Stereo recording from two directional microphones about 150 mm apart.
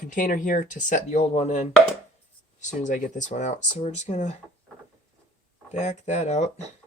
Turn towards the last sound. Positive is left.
turn(degrees=50)  # may be behind; listen again after turning